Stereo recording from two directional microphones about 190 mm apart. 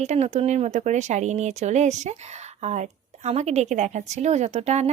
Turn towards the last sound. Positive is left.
turn(degrees=-35)  # may be behind; listen again after turning